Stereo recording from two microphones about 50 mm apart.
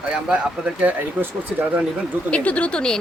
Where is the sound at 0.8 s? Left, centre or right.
Right.